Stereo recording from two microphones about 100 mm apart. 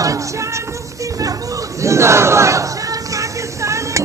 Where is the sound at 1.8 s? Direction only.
30° right (ahead or behind).